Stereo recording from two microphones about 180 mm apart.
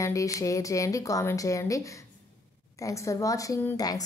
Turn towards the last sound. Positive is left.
turn(degrees=20)  # may be behind; listen again after turning